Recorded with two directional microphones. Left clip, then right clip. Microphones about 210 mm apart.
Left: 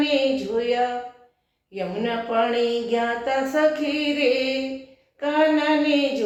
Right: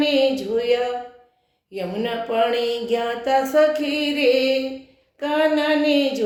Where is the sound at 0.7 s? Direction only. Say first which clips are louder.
Right 2 dB; 50° right (ahead or behind).